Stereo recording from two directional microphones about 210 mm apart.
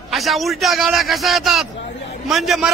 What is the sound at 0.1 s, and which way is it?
A man's voice, centre (ahead or behind).